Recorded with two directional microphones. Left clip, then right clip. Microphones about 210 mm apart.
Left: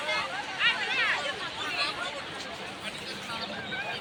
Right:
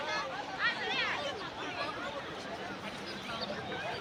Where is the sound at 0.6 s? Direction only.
10° left (ahead or behind).